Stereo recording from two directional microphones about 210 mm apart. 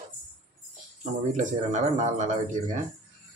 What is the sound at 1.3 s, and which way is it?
A man's voice, 35° right (ahead or behind).